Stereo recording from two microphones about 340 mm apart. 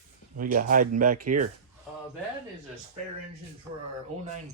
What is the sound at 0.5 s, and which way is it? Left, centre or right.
Speech, right.